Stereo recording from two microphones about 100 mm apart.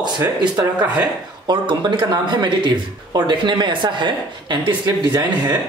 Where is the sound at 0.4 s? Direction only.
45° right (ahead or behind).